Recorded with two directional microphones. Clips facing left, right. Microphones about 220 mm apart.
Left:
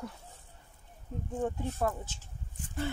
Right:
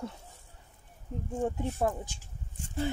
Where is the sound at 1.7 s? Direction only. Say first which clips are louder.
Right 2 dB; 15° right (ahead or behind).